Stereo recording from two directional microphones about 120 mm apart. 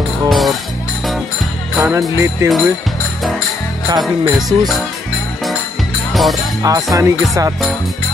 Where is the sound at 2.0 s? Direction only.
25° right (ahead or behind).